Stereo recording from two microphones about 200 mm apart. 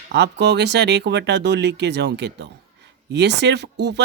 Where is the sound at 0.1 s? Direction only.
60° right (ahead or behind).